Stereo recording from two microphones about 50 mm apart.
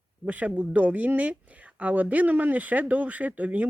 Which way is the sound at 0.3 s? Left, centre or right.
Right.